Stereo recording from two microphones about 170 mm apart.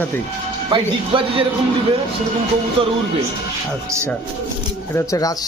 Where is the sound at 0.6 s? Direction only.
30° right (ahead or behind).